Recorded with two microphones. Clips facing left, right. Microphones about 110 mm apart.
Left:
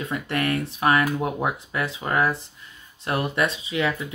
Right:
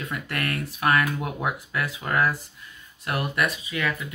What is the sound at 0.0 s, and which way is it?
Speech, 25° left (ahead or behind).